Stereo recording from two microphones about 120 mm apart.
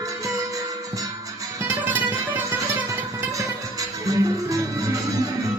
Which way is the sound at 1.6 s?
15° right (ahead or behind).